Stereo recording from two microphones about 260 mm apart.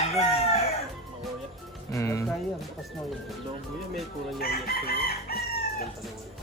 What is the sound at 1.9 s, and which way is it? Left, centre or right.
Speech, centre.